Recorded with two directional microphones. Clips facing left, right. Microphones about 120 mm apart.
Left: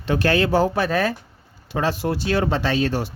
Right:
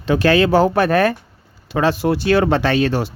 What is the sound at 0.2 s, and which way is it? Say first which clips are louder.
Speech: right 5 dB; 90° right.